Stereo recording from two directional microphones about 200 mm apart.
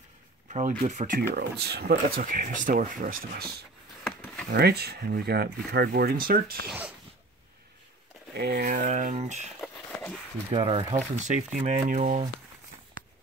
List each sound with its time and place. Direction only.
0.5 s speech: 40° right (ahead or behind)
1.6 s speech: 55° right (ahead or behind)
4.0 s a sound: 5° left (ahead or behind)
4.5 s speech: 55° right (ahead or behind)
8.4 s speech: 50° right (ahead or behind); by 9.5 s 35° right (ahead or behind)
9.6 s a sound: 5° left (ahead or behind)
10.5 s speech: 25° right (ahead or behind)